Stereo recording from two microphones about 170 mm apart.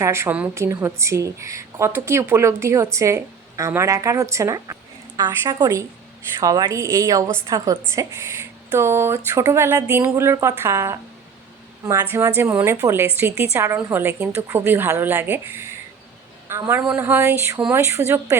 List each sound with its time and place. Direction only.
0.0 s a woman's voice: 15° right (ahead or behind)